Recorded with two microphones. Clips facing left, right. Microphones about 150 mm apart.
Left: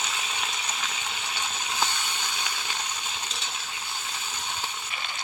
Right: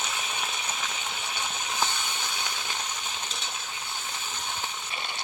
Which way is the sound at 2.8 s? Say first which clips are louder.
Even; 15° left (ahead or behind).